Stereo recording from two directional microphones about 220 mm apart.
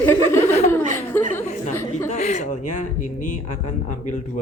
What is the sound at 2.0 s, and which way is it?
Speech, 30° left (ahead or behind).